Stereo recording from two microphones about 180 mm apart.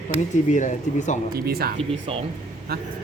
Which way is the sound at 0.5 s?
45° left (ahead or behind).